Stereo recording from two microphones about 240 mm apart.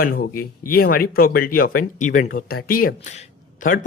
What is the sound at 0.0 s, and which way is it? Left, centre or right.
Speech, left.